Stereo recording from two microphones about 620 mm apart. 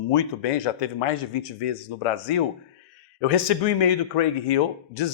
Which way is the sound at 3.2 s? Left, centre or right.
Left.